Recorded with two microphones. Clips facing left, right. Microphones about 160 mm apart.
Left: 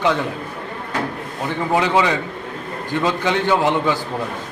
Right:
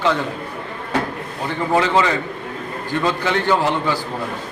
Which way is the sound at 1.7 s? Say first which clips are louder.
Even; 15° left (ahead or behind).